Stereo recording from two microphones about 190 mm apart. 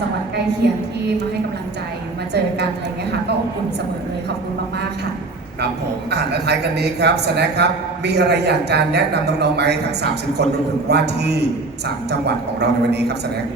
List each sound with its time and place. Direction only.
0.6 s a man's voice: 60° right (ahead or behind)
6.1 s a man's voice: 60° right (ahead or behind)